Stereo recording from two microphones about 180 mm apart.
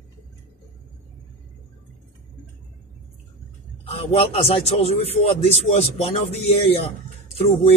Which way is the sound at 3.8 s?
35° left (ahead or behind).